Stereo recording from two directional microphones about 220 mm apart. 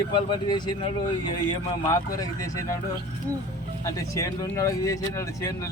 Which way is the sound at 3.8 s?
15° left (ahead or behind).